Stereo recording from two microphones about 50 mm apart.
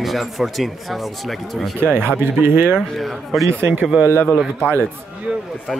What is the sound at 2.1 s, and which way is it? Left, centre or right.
Speech, right.